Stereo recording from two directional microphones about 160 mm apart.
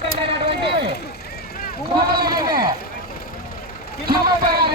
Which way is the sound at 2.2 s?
30° right (ahead or behind).